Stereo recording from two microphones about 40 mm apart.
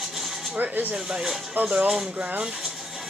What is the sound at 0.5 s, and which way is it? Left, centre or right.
Speech, right.